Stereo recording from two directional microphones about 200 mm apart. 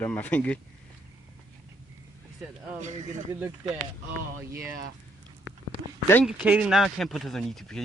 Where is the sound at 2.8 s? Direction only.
35° right (ahead or behind).